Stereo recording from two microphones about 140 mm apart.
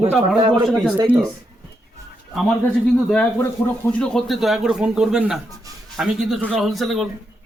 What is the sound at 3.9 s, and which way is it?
A man's voice, 5° left (ahead or behind).